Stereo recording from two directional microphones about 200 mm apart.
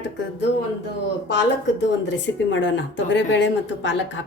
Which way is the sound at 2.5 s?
65° left (ahead or behind).